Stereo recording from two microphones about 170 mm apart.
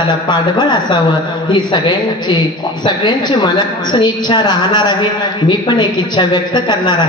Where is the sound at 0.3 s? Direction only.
25° left (ahead or behind).